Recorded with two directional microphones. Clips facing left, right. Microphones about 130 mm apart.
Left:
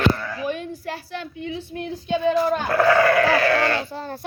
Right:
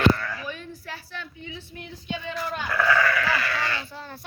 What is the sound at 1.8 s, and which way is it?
Speech, 35° left (ahead or behind).